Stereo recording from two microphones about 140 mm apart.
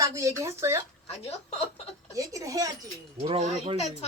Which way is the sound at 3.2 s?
45° right (ahead or behind).